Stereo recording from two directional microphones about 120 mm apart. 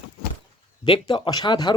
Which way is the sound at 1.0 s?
35° left (ahead or behind).